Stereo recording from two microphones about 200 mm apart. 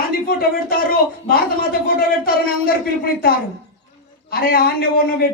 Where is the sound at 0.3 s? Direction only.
45° left (ahead or behind).